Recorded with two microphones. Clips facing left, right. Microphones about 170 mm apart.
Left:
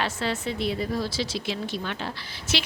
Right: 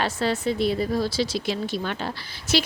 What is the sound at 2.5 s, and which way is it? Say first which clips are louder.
Speech: right 6 dB; 40° right (ahead or behind).